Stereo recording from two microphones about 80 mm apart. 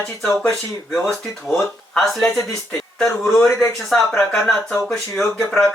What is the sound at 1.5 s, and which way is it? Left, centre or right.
Speech, centre.